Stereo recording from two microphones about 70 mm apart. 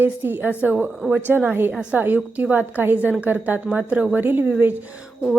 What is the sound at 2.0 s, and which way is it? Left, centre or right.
A woman's voice, right.